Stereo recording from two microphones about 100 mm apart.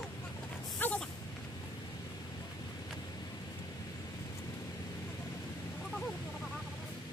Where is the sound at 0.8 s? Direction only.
15° left (ahead or behind).